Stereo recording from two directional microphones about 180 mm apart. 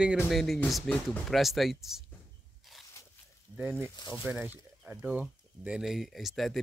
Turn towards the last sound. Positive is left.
turn(degrees=0)  # may be behind; listen again after turning